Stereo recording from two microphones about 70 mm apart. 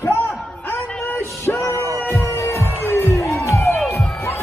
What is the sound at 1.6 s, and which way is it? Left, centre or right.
Music, right.